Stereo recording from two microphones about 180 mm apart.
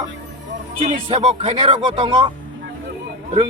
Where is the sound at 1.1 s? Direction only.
35° right (ahead or behind).